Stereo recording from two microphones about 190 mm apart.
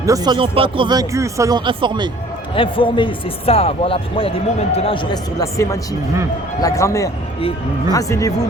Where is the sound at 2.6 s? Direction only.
25° left (ahead or behind).